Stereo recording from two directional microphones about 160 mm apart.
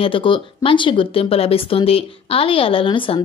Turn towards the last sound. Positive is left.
turn(degrees=35)  # may be behind; listen again after turning